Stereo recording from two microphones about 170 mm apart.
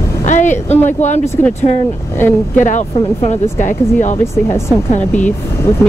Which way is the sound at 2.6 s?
45° left (ahead or behind).